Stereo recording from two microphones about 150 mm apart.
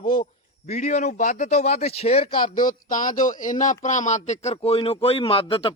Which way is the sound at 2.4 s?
65° left (ahead or behind).